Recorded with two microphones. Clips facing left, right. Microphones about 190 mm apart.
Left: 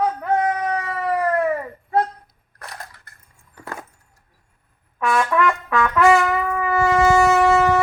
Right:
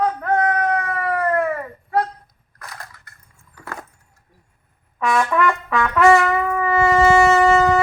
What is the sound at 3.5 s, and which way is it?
Keys jangling, 15° left (ahead or behind).